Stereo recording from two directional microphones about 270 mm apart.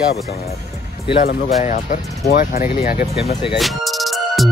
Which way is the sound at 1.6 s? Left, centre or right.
Left.